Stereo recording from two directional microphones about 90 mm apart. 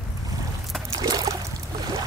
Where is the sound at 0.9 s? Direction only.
45° right (ahead or behind).